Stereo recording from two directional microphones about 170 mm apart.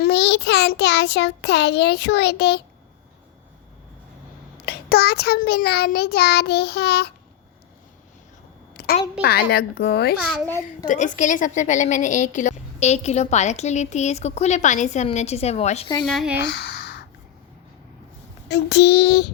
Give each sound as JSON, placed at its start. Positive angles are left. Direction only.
{"t": 0.0, "sound": "child singing", "side_deg": 80}
{"t": 4.6, "sound": "child singing", "side_deg": 65}
{"t": 8.7, "sound": "a sound", "side_deg": 65}
{"t": 9.2, "sound": "child singing", "side_deg": 65}
{"t": 10.8, "sound": "a woman's voice", "side_deg": 45}
{"t": 16.0, "sound": "speech", "side_deg": 0}
{"t": 16.5, "sound": "a sound", "side_deg": 75}
{"t": 18.4, "sound": "child singing", "side_deg": 85}